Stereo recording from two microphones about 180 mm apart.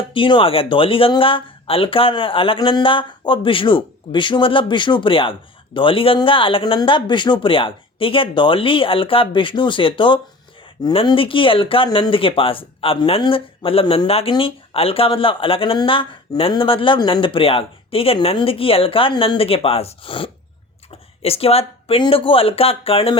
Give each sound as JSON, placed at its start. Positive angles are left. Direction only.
{"t": 0.1, "sound": "speech", "side_deg": 30}